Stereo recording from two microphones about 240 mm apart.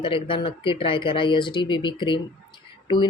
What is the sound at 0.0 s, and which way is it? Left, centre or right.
Speech, left.